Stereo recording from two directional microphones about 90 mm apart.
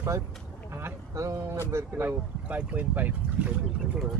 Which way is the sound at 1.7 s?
25° right (ahead or behind).